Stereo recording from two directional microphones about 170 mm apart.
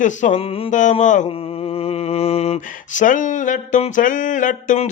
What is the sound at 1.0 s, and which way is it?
Mantra, 45° left (ahead or behind).